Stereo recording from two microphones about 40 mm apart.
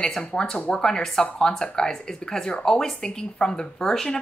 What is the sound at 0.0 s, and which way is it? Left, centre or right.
A woman's voice, centre.